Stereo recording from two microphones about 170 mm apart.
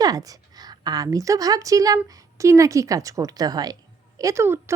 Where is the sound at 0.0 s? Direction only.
20° right (ahead or behind).